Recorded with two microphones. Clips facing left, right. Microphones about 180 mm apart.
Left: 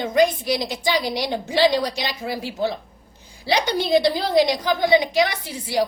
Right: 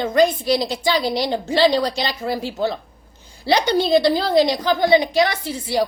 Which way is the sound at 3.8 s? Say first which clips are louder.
Right 2 dB; 15° left (ahead or behind).